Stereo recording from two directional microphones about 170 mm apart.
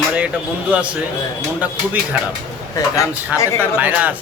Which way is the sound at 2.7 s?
20° left (ahead or behind).